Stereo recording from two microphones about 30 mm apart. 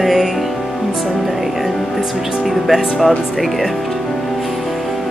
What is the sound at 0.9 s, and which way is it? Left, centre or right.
Speech, centre.